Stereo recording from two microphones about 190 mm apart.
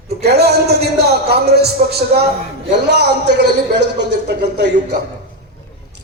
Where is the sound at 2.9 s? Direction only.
60° right (ahead or behind).